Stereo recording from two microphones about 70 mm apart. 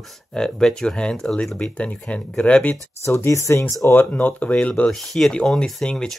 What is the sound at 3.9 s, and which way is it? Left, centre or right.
Speech, left.